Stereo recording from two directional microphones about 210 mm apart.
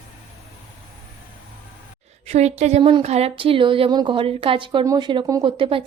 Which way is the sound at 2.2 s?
30° right (ahead or behind).